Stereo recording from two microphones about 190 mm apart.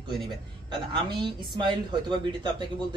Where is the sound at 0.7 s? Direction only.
25° right (ahead or behind).